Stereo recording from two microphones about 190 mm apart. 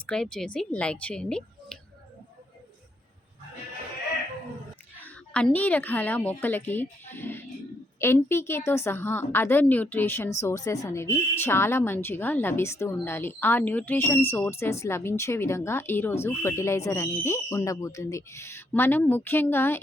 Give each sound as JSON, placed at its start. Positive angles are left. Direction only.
{"t": 0.0, "sound": "speech", "side_deg": 5}
{"t": 4.9, "sound": "a woman's voice", "side_deg": 5}